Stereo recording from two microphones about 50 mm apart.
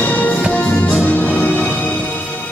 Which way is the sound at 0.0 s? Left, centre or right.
Left.